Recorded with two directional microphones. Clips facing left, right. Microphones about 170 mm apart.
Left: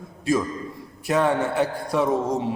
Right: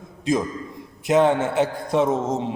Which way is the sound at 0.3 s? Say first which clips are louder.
Even; 20° right (ahead or behind).